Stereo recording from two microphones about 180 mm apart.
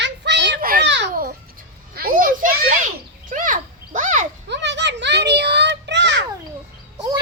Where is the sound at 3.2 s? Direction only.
45° right (ahead or behind).